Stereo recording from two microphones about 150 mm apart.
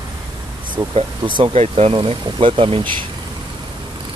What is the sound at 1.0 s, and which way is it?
Speech, 35° right (ahead or behind).